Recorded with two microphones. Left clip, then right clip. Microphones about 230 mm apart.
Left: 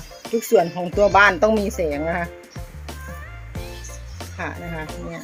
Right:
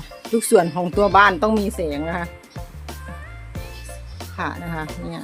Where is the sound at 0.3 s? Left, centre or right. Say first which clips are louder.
Right 1 dB; right.